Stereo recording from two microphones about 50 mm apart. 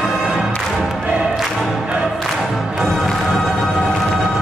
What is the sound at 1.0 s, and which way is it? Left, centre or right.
Music, right.